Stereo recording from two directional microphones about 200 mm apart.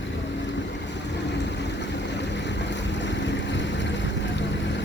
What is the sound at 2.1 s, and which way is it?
Boat, 60° left (ahead or behind).